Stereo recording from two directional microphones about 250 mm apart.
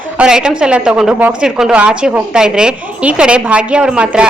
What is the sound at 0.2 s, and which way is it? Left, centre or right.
A woman's voice, centre.